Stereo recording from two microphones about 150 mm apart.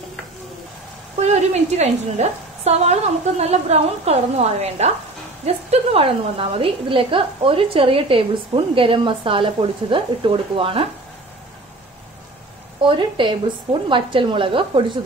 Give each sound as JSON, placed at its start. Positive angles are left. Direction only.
{"t": 1.2, "sound": "a woman's voice", "side_deg": -45}
{"t": 12.8, "sound": "a woman's voice", "side_deg": -30}